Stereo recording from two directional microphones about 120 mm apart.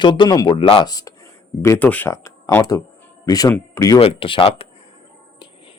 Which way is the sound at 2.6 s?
30° left (ahead or behind).